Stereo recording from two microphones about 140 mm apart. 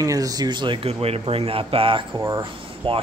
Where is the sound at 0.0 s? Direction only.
25° right (ahead or behind).